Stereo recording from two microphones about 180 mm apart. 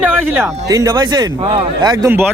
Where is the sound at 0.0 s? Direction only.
15° right (ahead or behind).